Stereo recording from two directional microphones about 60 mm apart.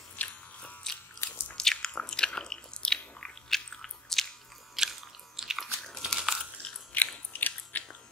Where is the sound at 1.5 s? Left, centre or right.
Centre.